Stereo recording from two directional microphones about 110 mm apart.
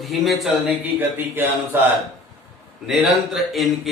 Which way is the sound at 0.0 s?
Centre (ahead or behind).